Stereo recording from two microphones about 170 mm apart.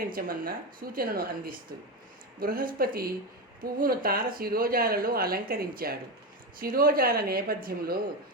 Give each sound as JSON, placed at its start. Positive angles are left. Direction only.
{"t": 0.1, "sound": "speech", "side_deg": -55}